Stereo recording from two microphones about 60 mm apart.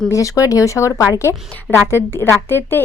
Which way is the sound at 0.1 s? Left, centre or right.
Left.